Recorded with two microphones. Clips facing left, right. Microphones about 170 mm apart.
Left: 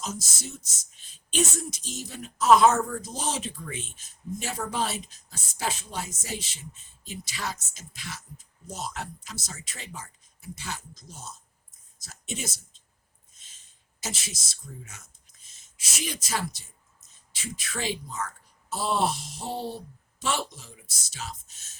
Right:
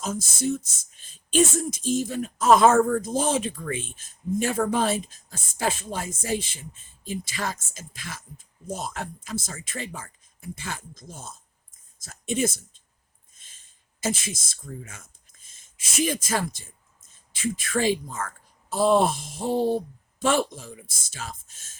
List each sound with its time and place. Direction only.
0.0 s speech: 55° right (ahead or behind)
14.0 s speech: 50° right (ahead or behind)